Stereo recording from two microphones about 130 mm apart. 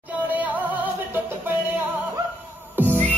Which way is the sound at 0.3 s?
15° right (ahead or behind).